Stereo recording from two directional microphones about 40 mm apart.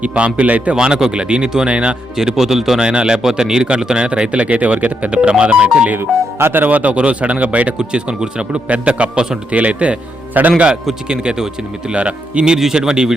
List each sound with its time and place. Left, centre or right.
0.2 s speech: right
0.8 s speech: centre
2.1 s speech: centre
2.8 s speech: right
5.3 s speech: right
6.7 s speech: right
7.8 s speech: right
8.6 s speech: right
10.3 s a man's voice: right
11.1 s speech: right
12.5 s speech: centre